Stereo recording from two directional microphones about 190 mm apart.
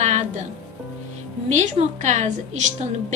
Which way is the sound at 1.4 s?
40° right (ahead or behind).